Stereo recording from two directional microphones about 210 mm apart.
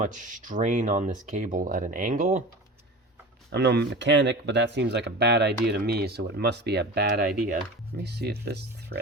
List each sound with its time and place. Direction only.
0.0 s speech: 35° right (ahead or behind)
3.5 s speech: 55° right (ahead or behind)